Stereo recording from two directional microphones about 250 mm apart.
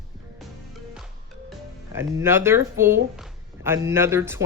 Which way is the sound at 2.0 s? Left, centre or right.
Centre.